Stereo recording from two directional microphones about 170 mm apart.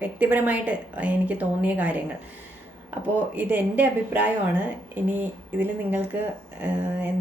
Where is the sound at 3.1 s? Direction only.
10° right (ahead or behind).